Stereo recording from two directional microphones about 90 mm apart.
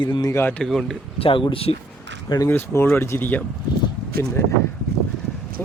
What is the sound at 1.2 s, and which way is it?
Speech, 75° left (ahead or behind).